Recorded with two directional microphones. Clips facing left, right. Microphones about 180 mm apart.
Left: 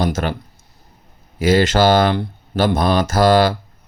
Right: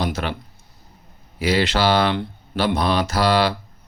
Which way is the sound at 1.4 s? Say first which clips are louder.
Left 5 dB; 45° left (ahead or behind).